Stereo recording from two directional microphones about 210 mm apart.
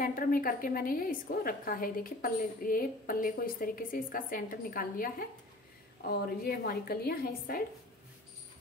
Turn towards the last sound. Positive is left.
turn(degrees=45)  # may be behind; listen again after turning